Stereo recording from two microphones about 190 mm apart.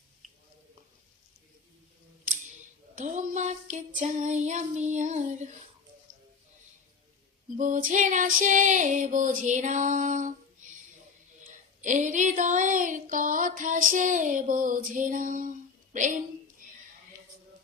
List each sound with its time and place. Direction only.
2.9 s female singing: 40° right (ahead or behind)
7.5 s female singing: 45° right (ahead or behind)
11.4 s a sound: 40° right (ahead or behind)